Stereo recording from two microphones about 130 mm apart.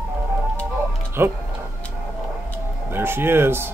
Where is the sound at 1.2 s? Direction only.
15° right (ahead or behind).